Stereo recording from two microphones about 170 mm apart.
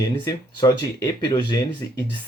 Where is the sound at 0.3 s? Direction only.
20° left (ahead or behind).